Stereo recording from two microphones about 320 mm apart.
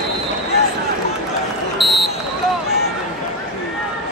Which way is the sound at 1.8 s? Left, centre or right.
Centre.